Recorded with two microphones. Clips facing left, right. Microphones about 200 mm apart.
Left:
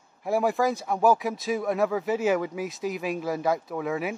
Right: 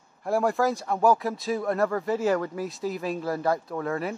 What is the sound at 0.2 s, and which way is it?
Speech, centre (ahead or behind).